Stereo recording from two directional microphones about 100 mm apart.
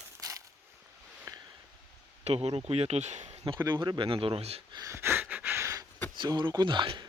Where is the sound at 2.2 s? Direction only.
85° right.